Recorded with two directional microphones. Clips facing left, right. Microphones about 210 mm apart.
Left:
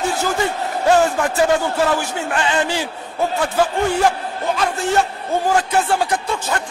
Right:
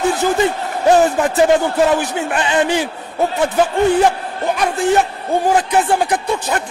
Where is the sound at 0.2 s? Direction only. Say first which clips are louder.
Right 4 dB; 20° right (ahead or behind).